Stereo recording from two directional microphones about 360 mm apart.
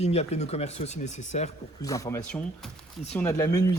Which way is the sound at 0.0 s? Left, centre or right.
Centre.